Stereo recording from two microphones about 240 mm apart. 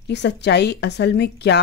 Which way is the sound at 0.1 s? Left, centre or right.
Left.